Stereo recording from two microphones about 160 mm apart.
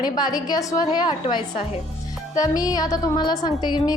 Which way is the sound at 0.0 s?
25° left (ahead or behind).